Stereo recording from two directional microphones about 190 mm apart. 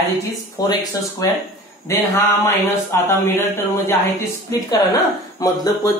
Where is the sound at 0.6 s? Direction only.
20° left (ahead or behind).